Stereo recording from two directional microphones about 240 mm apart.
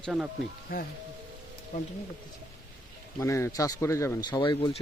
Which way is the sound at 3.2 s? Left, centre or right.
Centre.